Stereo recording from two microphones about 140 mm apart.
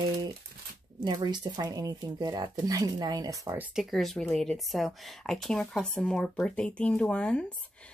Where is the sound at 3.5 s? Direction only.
10° right (ahead or behind).